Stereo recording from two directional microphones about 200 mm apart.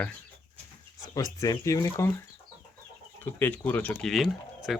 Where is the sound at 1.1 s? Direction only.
15° left (ahead or behind).